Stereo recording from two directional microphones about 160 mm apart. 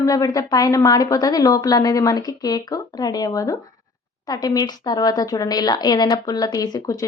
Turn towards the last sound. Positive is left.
turn(degrees=20)  # may be behind; listen again after turning